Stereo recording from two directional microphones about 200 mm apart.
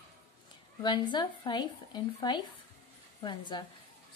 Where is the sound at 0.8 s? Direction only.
25° left (ahead or behind).